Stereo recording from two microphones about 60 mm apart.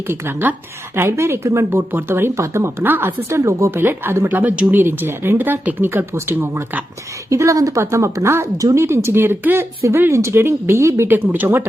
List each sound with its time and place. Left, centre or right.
0.1 s speech: right
1.9 s speech: right
2.4 s speech: right
2.8 s speech: right
3.2 s speech: right
3.8 s speech: right
7.3 s a woman's voice: right
7.8 s speech: right
11.1 s speech: right